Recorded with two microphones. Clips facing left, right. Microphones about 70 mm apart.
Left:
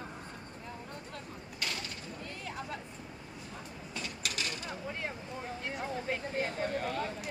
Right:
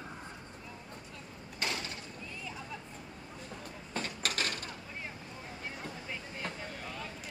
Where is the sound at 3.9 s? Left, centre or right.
Right.